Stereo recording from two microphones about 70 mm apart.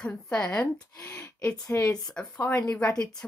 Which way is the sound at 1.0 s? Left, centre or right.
Left.